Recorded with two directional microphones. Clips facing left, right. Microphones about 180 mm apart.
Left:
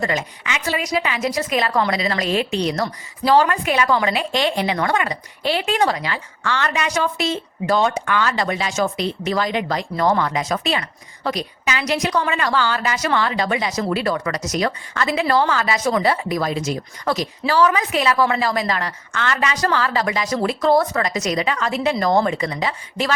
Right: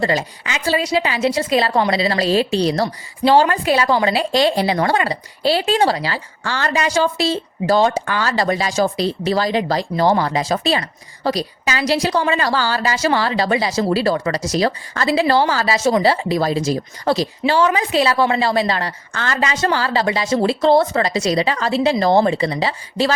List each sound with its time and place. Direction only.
0.0 s a woman's voice: 35° right (ahead or behind)